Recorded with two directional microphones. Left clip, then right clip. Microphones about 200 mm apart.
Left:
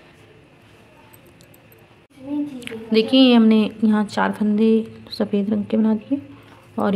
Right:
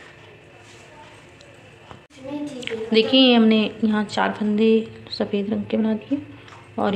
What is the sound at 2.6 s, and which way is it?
A woman's voice, 30° left (ahead or behind).